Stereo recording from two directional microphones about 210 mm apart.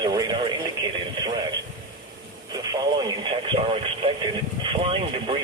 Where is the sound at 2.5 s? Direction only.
20° right (ahead or behind).